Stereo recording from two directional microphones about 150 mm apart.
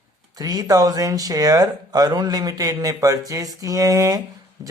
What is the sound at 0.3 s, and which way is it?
Speech, 25° right (ahead or behind).